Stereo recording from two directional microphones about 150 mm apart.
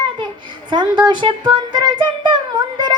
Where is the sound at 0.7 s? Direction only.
30° right (ahead or behind).